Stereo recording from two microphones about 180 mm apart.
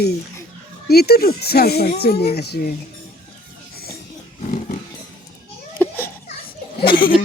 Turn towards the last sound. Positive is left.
turn(degrees=50)  # may be behind; listen again after turning